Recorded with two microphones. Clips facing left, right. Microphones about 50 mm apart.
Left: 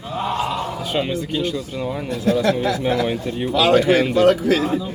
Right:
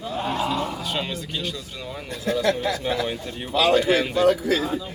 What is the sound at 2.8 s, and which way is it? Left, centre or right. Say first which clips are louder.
Speech: left 5 dB; left.